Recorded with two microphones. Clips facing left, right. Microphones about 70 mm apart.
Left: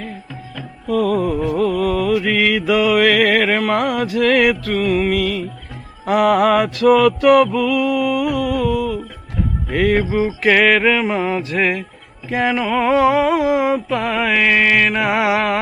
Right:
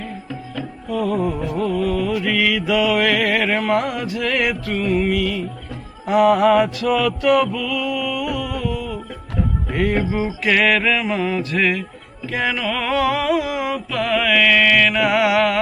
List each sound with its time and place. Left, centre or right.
0.9 s music: left
10.1 s mantra: left